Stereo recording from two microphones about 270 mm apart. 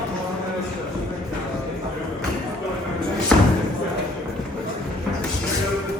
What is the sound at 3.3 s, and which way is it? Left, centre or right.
Thump, centre.